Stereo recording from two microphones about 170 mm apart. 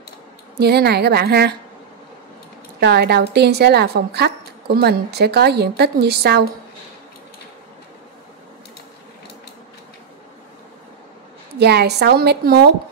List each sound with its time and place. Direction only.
0.6 s a woman's voice: 70° right (ahead or behind)
2.8 s a woman's voice: 70° right (ahead or behind)
11.5 s a woman's voice: 75° right (ahead or behind)